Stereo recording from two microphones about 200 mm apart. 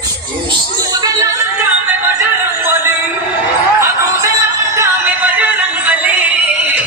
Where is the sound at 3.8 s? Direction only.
15° right (ahead or behind).